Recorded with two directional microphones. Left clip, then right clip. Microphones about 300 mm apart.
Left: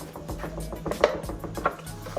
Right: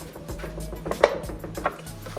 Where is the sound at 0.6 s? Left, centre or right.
Centre.